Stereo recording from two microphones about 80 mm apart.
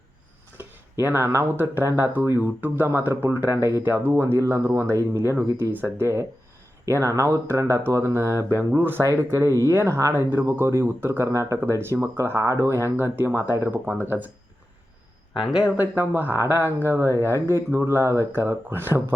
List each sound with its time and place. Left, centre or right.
0.5 s a sound: right
1.5 s speech: right
13.7 s speech: centre
14.0 s speech: right
15.8 s speech: right